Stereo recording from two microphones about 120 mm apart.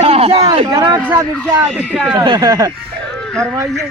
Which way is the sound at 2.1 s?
40° right (ahead or behind).